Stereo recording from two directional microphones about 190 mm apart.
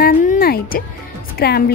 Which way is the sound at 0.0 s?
45° left (ahead or behind).